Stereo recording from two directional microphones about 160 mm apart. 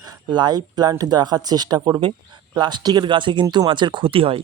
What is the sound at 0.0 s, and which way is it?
Speech, 25° right (ahead or behind).